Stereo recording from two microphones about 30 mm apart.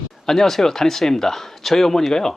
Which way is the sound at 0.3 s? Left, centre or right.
Centre.